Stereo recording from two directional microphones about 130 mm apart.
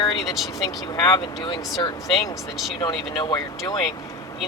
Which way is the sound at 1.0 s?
35° left (ahead or behind).